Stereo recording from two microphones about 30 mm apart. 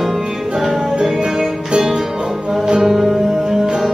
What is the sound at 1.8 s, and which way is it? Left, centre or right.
Music, centre.